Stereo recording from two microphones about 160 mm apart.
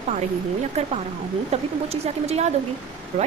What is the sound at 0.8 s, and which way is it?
A woman's voice, 40° right (ahead or behind).